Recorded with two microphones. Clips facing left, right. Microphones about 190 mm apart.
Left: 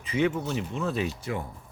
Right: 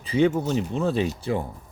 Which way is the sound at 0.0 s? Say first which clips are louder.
Right 5 dB; 35° right (ahead or behind).